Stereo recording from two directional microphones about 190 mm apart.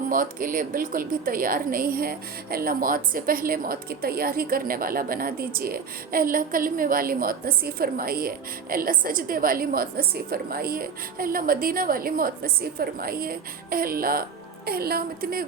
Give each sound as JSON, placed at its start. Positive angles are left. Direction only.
{"t": 0.1, "sound": "a woman's voice", "side_deg": -45}